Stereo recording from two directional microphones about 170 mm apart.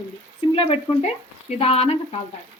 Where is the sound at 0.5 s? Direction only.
35° left (ahead or behind).